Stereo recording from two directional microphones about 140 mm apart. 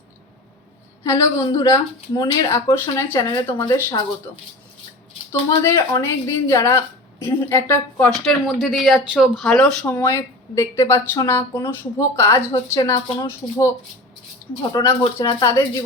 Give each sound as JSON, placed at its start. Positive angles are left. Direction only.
{"t": 1.0, "sound": "speech", "side_deg": 20}
{"t": 5.3, "sound": "speech", "side_deg": 20}
{"t": 8.1, "sound": "speech", "side_deg": 5}